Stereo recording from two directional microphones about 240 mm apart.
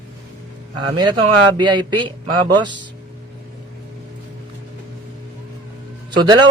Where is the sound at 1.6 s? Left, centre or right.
Right.